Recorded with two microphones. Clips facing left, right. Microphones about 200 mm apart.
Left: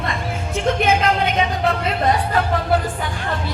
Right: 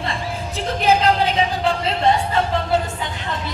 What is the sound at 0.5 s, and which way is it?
Music, 35° right (ahead or behind).